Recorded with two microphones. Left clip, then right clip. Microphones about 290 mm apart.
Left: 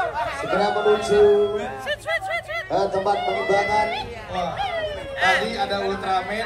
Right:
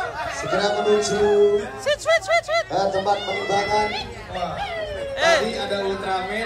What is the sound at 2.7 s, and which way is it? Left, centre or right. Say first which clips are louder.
Speech: even; left.